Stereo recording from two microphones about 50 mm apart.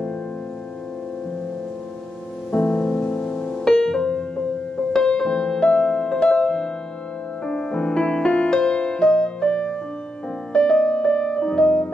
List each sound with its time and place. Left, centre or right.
2.5 s music: centre